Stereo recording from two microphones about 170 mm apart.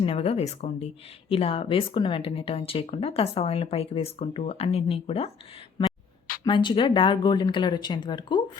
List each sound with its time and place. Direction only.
0.0 s speech: 35° left (ahead or behind)
6.4 s speech: 25° left (ahead or behind)